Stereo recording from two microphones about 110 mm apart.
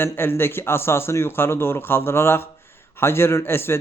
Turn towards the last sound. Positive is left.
turn(degrees=20)  # may be behind; listen again after turning